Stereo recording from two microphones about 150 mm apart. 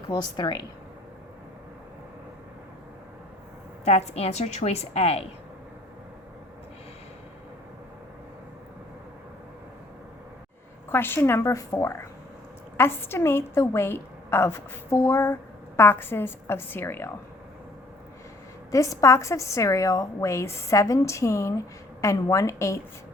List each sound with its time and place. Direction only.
0.1 s a woman's voice: 30° left (ahead or behind)
3.8 s a woman's voice: 45° left (ahead or behind)
10.8 s a woman's voice: 15° left (ahead or behind)
18.7 s a woman's voice: 20° left (ahead or behind)